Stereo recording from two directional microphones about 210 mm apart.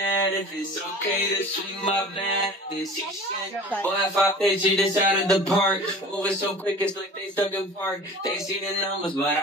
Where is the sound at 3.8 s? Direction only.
Centre (ahead or behind).